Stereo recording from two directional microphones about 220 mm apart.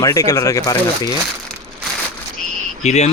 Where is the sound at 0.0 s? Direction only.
15° left (ahead or behind).